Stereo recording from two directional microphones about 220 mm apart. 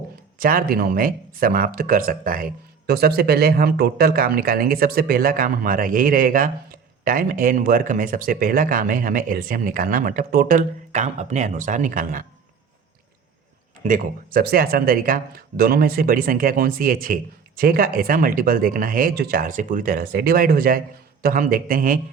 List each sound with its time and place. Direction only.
0.3 s speech: 40° right (ahead or behind)
13.8 s speech: 35° right (ahead or behind)